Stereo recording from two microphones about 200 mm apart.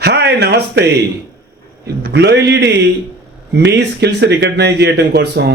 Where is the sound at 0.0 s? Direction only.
55° right (ahead or behind).